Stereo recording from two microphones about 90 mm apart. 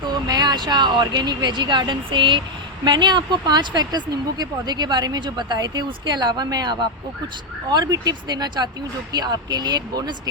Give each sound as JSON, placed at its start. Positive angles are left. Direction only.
{"t": 0.1, "sound": "speech", "side_deg": -50}
{"t": 2.8, "sound": "speech", "side_deg": -55}